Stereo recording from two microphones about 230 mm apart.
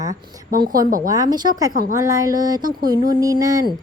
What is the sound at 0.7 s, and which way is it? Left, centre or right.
Speech, right.